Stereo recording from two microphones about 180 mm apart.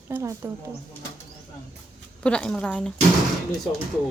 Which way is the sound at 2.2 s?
5° left (ahead or behind).